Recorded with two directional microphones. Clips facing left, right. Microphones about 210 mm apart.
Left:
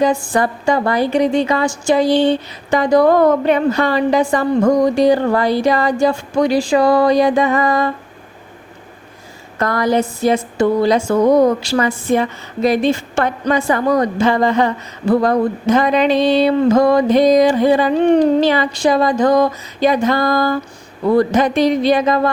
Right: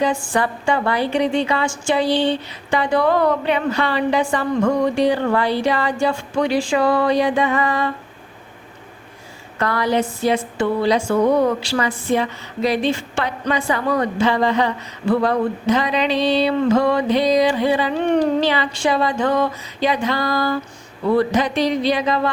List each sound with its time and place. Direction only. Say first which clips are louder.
0.0 s a woman's voice: left 4 dB; 40° left (ahead or behind)
9.6 s a woman's voice: left 3 dB; 45° left (ahead or behind)